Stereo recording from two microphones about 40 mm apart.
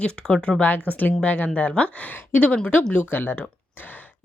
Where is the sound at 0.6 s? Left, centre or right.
Left.